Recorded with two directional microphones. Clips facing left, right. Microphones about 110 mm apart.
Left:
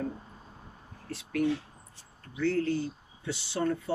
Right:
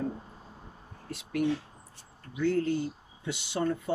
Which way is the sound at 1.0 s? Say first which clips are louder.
Even; 20° right (ahead or behind).